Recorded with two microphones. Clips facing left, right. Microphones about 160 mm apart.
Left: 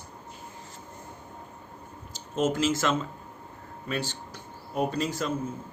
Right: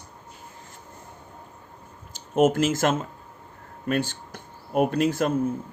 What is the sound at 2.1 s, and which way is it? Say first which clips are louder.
Speech: right 7 dB; 55° right (ahead or behind).